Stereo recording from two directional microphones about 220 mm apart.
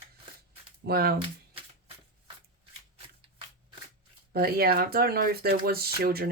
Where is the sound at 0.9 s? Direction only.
45° right (ahead or behind).